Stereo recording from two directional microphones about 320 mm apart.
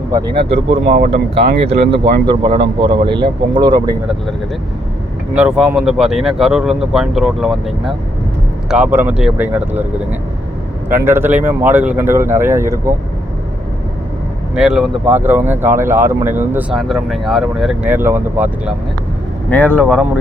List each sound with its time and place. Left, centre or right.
0.4 s speech: centre
5.3 s speech: centre
14.5 s speech: centre
19.5 s speech: centre